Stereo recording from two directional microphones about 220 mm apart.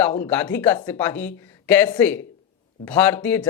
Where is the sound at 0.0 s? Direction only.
10° left (ahead or behind).